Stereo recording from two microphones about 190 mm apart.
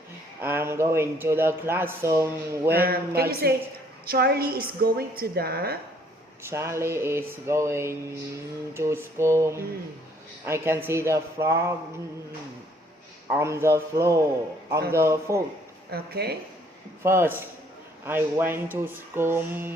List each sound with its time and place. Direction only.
0.4 s speech: 10° right (ahead or behind)
2.6 s a woman's voice: 55° right (ahead or behind)
6.4 s speech: 15° right (ahead or behind)
13.3 s speech: 15° right (ahead or behind)
15.9 s speech: 55° right (ahead or behind)
17.0 s speech: 15° right (ahead or behind)